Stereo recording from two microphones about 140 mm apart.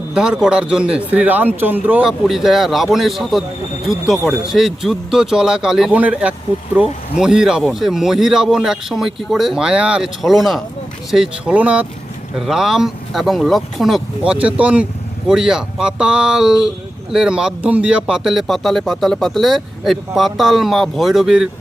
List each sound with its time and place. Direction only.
0.1 s speech: 5° right (ahead or behind)